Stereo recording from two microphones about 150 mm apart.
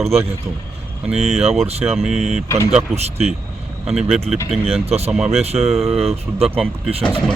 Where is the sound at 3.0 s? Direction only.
45° right (ahead or behind).